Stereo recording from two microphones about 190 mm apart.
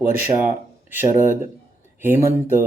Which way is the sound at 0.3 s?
10° right (ahead or behind).